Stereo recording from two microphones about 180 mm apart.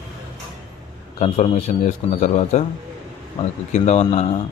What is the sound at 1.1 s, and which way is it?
A man's voice, 40° left (ahead or behind).